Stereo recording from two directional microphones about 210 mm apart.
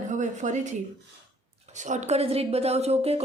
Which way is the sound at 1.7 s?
35° right (ahead or behind).